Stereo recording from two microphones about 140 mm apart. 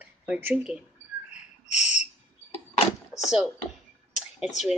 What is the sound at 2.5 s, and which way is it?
Door, 45° left (ahead or behind).